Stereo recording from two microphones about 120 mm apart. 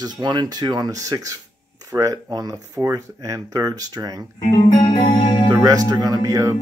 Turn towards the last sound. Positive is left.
turn(degrees=-25)  # may be behind; listen again after turning